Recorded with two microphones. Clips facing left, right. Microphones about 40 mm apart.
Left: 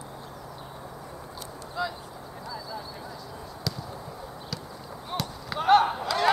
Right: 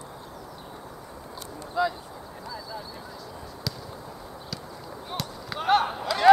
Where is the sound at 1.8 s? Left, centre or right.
Centre.